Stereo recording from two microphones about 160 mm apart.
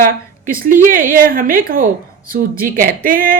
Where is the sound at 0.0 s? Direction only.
60° right (ahead or behind).